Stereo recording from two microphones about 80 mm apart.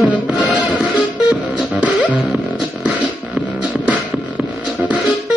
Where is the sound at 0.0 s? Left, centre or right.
Centre.